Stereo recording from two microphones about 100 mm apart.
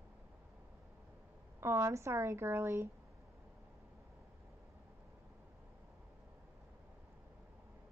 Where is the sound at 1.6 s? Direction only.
25° right (ahead or behind).